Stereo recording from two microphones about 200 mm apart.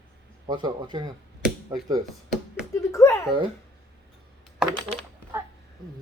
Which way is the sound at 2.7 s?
15° left (ahead or behind).